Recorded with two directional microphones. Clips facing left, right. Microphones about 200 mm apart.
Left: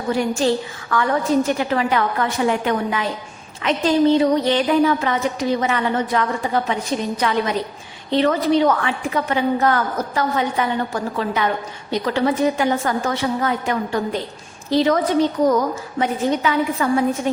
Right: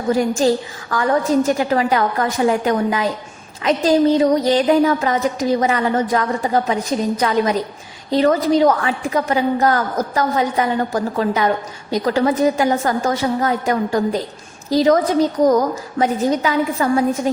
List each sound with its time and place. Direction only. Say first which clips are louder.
0.1 s a woman's voice: right 3 dB; 40° right (ahead or behind)